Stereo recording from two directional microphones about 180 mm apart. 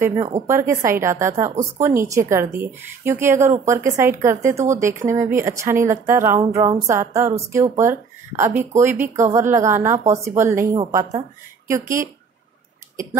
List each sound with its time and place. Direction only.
0.0 s a woman's voice: 20° right (ahead or behind)